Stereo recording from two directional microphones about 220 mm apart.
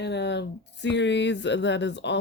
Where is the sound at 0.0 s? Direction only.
50° left (ahead or behind).